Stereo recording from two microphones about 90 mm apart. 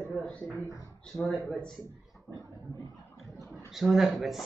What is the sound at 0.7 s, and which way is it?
Speech, 40° left (ahead or behind).